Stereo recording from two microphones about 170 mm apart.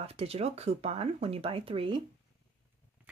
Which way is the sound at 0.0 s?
35° right (ahead or behind).